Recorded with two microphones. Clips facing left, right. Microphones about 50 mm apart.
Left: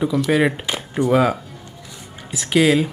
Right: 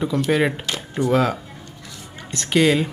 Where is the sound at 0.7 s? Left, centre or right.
Centre.